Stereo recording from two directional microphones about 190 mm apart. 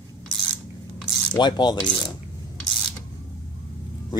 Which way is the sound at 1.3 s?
25° left (ahead or behind).